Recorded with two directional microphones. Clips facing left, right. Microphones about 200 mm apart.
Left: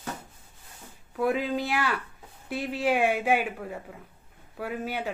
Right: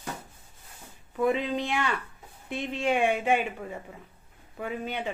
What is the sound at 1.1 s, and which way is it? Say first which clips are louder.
Speech: even; 5° left (ahead or behind).